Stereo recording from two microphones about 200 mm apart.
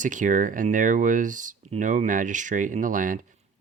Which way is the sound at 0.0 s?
40° right (ahead or behind).